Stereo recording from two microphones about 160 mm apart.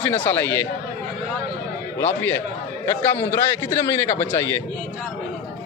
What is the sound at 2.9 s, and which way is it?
A man's voice, 15° left (ahead or behind).